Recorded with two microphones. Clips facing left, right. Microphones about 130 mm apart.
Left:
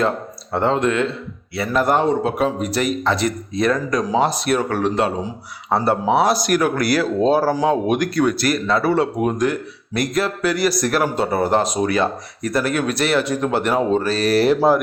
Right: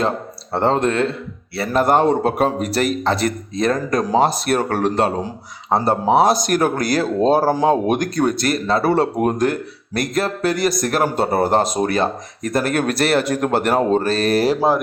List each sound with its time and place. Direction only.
0.5 s speech: 35° right (ahead or behind)
2.0 s speech: 50° right (ahead or behind)
2.8 s speech: 35° right (ahead or behind)
3.6 s speech: 45° right (ahead or behind)
7.5 s speech: 30° right (ahead or behind)
7.9 s speech: 45° right (ahead or behind)
8.4 s speech: 30° right (ahead or behind)
8.8 s speech: 45° right (ahead or behind)